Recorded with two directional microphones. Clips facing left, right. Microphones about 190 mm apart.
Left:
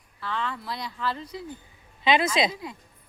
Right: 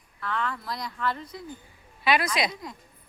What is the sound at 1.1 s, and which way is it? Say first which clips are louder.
Speech: left 1 dB; 30° left (ahead or behind).